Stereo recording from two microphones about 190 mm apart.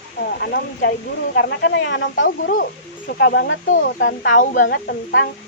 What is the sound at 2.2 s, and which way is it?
Speech, 50° left (ahead or behind).